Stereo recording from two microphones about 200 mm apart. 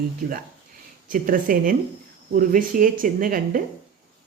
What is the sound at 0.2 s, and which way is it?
Speech, 40° right (ahead or behind).